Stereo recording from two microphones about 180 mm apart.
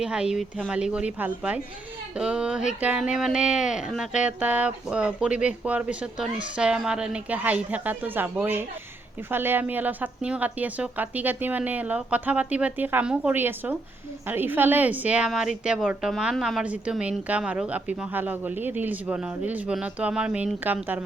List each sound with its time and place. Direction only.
0.0 s a woman's voice: 5° right (ahead or behind)